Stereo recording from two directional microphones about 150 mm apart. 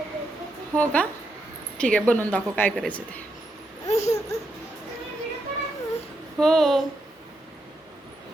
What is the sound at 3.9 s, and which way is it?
Babbling, 45° left (ahead or behind).